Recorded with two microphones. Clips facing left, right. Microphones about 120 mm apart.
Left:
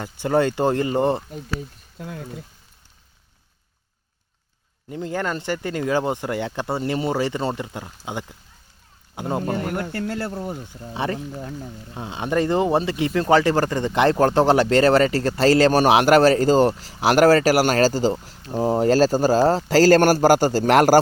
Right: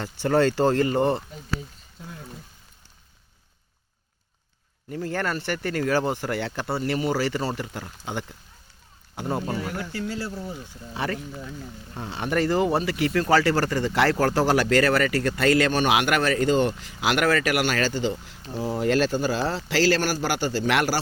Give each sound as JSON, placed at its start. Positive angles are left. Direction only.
{"t": 0.0, "sound": "speech", "side_deg": 15}
{"t": 2.0, "sound": "speech", "side_deg": 70}
{"t": 4.9, "sound": "speech", "side_deg": 20}
{"t": 9.4, "sound": "speech", "side_deg": 55}
{"t": 10.9, "sound": "speech", "side_deg": 25}